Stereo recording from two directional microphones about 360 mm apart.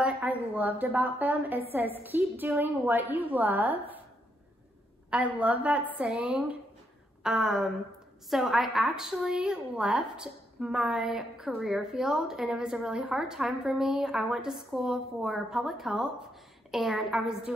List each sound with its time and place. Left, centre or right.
0.0 s a woman's voice: centre
5.1 s a woman's voice: centre